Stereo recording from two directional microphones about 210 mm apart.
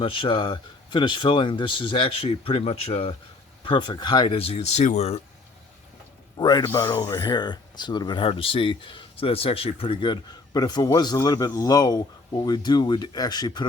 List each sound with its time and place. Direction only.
0.0 s speech: 25° left (ahead or behind)
6.3 s speech: 20° left (ahead or behind)